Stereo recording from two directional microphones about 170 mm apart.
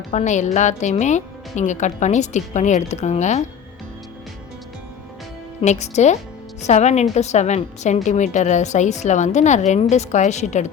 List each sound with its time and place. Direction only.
0.1 s speech: 40° left (ahead or behind)
5.6 s a woman's voice: 40° left (ahead or behind)